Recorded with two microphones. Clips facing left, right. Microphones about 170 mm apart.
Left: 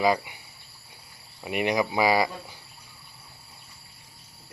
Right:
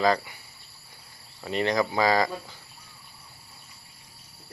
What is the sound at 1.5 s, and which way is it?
Speech, 15° left (ahead or behind).